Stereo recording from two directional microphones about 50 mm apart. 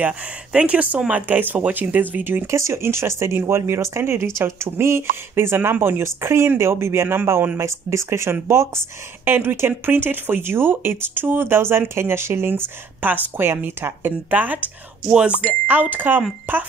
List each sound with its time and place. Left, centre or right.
0.5 s speech: right
1.2 s speech: right
2.4 s speech: right
7.5 s speech: right
9.2 s speech: right